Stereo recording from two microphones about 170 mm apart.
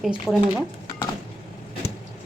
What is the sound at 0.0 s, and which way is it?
Speech, 5° right (ahead or behind).